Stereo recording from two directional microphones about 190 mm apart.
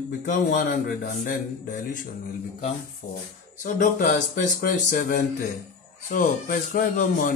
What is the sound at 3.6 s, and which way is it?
A man's voice, 40° left (ahead or behind).